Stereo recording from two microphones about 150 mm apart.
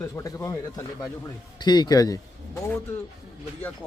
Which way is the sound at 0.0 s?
20° left (ahead or behind).